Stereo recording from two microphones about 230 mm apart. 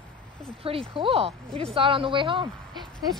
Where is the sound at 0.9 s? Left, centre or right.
Right.